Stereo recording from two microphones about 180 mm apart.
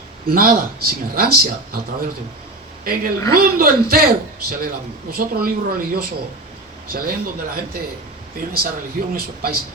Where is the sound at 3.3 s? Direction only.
55° right (ahead or behind).